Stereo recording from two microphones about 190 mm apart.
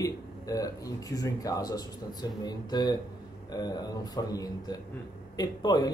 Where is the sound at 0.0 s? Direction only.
20° left (ahead or behind).